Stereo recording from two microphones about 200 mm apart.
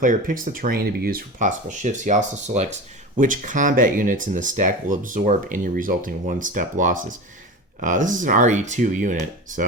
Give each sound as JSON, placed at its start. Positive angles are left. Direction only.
{"t": 0.0, "sound": "speech", "side_deg": -40}